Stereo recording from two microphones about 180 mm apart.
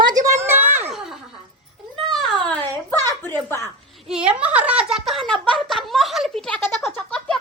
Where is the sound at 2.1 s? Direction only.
5° left (ahead or behind).